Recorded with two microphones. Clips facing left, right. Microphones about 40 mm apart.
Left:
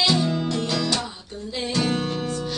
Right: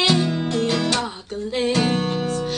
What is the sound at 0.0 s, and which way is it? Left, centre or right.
Music, right.